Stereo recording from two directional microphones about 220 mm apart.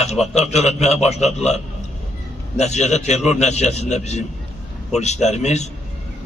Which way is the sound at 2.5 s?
30° left (ahead or behind).